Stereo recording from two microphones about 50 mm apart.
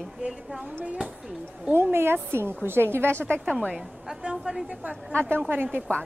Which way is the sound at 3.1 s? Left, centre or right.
Left.